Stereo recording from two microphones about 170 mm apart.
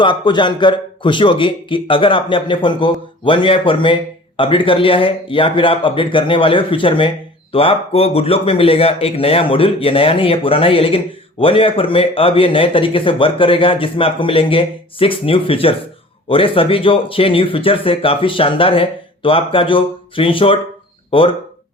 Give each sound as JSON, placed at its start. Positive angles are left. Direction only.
{"t": 0.0, "sound": "a man's voice", "side_deg": 30}